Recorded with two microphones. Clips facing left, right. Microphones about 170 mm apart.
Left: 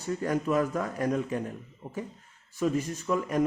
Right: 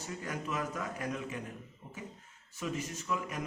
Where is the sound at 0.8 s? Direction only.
40° left (ahead or behind).